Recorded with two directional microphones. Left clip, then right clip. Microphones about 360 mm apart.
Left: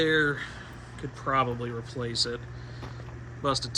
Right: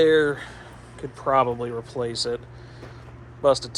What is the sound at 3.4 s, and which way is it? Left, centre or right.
Speech, centre.